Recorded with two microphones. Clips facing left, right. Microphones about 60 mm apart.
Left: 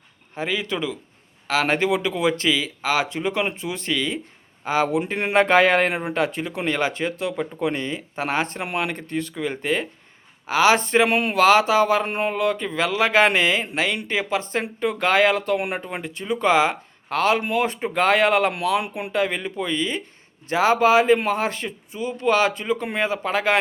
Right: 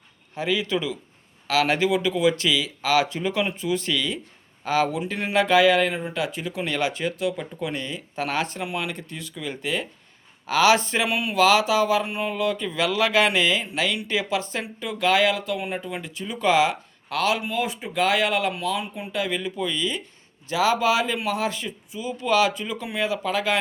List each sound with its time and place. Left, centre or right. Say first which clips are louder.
0.3 s speech: right 1 dB; left
4.9 s speech: left 4 dB; left
6.7 s speech: left 3 dB; left
8.6 s speech: left 3 dB; left
15.8 s speech: left 2 dB; left
16.2 s speech: left 2 dB; left
17.4 s speech: left 4 dB; left
18.5 s speech: left 5 dB; left
19.1 s speech: left 3 dB; left